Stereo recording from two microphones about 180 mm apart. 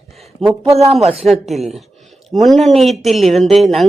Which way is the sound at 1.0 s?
35° right (ahead or behind).